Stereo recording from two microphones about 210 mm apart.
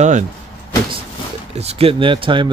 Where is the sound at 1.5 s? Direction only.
30° right (ahead or behind).